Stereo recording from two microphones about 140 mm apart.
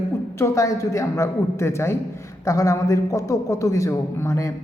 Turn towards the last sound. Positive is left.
turn(degrees=20)  # may be behind; listen again after turning